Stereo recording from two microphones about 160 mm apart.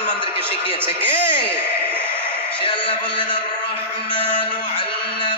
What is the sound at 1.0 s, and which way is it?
Speech, 35° left (ahead or behind).